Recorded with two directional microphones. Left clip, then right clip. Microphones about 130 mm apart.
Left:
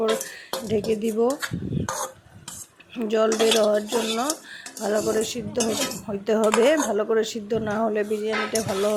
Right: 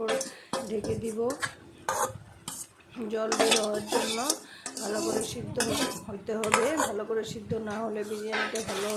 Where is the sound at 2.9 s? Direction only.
55° left (ahead or behind).